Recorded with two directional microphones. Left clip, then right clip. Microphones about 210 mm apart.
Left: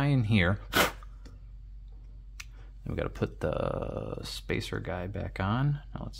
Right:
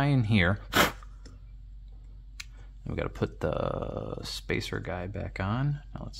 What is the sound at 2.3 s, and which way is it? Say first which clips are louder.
Speech: right 2 dB; centre (ahead or behind).